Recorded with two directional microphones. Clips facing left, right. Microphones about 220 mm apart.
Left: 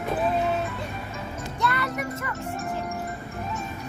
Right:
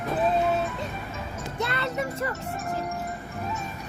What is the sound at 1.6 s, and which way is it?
Music, 25° right (ahead or behind).